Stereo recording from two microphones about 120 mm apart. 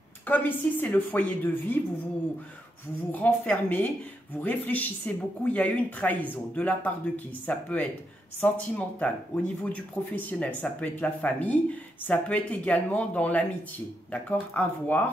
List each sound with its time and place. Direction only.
0.3 s speech: 15° left (ahead or behind)
3.1 s speech: 15° left (ahead or behind)